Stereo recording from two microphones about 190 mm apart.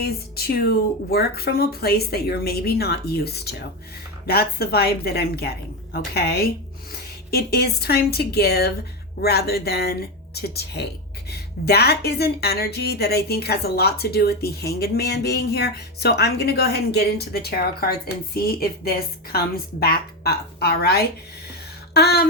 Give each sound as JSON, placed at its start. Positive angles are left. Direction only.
{"t": 0.0, "sound": "a woman's voice", "side_deg": 55}